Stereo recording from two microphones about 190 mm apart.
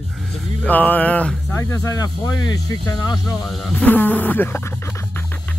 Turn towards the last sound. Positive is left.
turn(degrees=10)  # may be behind; listen again after turning